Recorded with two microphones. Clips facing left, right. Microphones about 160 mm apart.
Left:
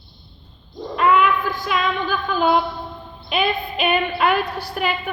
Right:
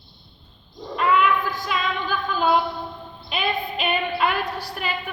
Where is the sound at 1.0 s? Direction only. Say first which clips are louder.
Left 3 dB; 55° left (ahead or behind).